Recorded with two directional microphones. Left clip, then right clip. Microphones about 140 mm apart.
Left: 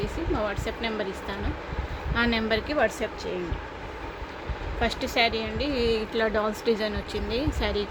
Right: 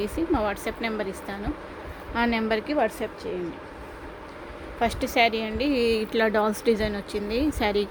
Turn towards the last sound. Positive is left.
turn(degrees=-65)  # may be behind; listen again after turning